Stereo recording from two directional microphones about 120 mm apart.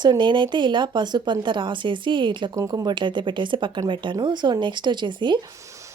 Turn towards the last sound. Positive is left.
turn(degrees=-40)  # may be behind; listen again after turning